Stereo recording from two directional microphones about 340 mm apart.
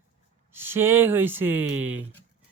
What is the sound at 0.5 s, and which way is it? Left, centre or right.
Speech, centre.